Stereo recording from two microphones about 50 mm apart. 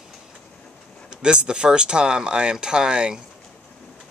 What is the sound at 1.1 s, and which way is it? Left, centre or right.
Speech, centre.